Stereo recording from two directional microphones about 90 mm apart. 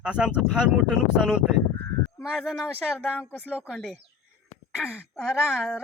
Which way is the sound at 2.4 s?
Centre (ahead or behind).